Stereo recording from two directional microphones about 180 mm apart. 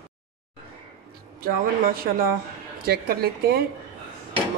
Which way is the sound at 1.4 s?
55° right (ahead or behind).